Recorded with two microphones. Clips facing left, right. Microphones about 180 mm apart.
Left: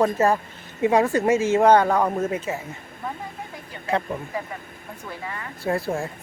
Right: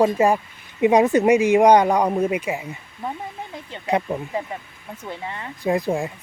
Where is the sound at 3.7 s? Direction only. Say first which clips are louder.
Right 3 dB; 25° right (ahead or behind).